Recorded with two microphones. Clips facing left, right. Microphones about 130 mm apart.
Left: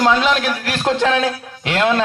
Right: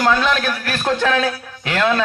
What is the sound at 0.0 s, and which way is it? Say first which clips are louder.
A man's voice: left 2 dB; 20° left (ahead or behind).